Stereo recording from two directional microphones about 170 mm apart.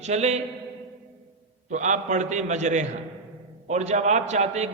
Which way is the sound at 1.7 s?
45° right (ahead or behind).